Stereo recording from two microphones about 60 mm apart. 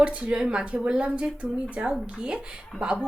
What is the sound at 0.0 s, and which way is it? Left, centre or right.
Speech, centre.